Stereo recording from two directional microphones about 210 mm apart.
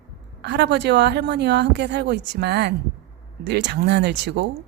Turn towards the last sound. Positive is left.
turn(degrees=-55)  # may be behind; listen again after turning